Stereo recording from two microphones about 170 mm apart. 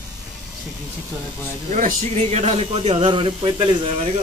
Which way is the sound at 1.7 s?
40° right (ahead or behind).